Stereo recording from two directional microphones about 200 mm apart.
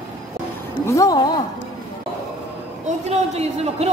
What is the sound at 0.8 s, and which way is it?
Speech, 15° left (ahead or behind).